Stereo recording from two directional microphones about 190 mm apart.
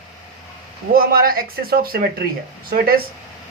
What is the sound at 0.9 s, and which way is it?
Speech, 50° right (ahead or behind).